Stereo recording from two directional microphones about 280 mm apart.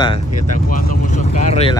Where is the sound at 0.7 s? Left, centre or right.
Left.